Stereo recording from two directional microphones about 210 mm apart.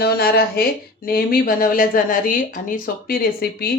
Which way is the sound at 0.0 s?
45° left (ahead or behind).